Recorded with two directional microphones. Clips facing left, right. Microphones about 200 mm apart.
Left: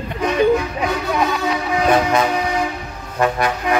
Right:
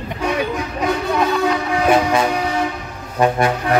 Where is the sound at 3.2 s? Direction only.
25° right (ahead or behind).